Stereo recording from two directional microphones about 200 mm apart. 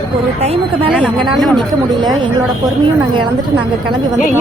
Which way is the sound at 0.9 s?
5° right (ahead or behind).